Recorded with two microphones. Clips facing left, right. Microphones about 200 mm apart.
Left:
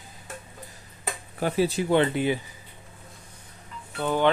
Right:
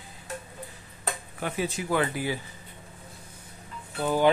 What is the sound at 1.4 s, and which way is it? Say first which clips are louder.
Speech: left 7 dB; 35° left (ahead or behind).